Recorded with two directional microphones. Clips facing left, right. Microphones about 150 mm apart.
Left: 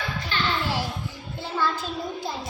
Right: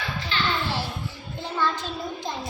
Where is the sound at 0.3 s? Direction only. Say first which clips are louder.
Even; 50° left (ahead or behind).